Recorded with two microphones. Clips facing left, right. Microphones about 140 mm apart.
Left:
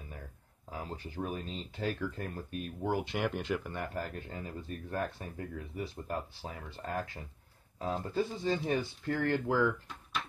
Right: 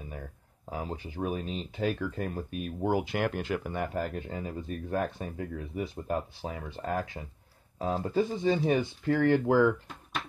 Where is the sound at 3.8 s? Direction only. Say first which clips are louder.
Right 6 dB; 15° right (ahead or behind).